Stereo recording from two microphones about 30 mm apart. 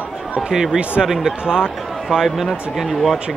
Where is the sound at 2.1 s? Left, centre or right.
Right.